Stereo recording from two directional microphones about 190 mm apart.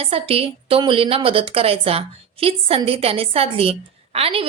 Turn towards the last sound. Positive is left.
turn(degrees=-30)  # may be behind; listen again after turning